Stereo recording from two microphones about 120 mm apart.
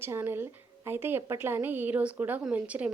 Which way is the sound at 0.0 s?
20° right (ahead or behind).